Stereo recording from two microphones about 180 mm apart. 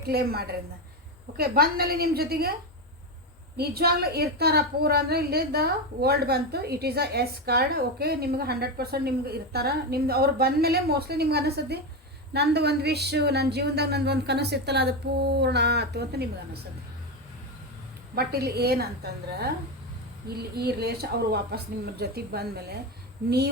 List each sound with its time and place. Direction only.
0.0 s a woman's voice: 60° right (ahead or behind)
3.6 s a woman's voice: 60° right (ahead or behind)
18.1 s a woman's voice: 60° right (ahead or behind)